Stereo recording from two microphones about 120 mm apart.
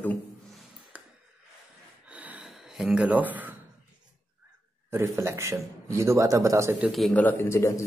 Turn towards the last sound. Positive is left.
turn(degrees=20)  # may be behind; listen again after turning